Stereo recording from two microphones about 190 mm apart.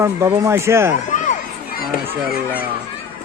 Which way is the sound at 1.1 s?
40° left (ahead or behind).